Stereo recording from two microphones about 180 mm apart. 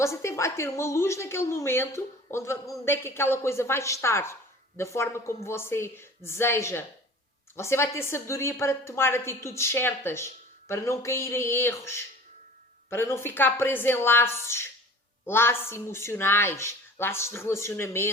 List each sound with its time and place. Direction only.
0.0 s speech: 15° left (ahead or behind)